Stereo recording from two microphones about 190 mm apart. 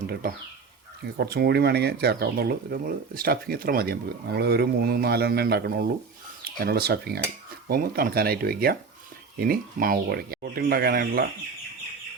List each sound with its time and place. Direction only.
1.1 s speech: 55° right (ahead or behind)